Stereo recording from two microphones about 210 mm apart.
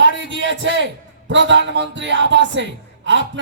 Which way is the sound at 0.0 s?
60° right (ahead or behind).